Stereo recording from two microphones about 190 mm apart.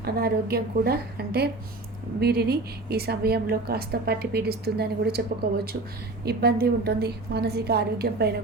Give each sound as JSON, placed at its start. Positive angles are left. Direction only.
{"t": 0.0, "sound": "a woman's voice", "side_deg": -55}